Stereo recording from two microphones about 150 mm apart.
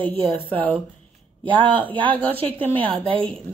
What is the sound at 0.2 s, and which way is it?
Speech, 35° right (ahead or behind).